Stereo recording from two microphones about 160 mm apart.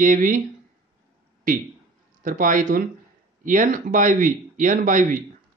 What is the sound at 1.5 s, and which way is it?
Speech, 60° right (ahead or behind).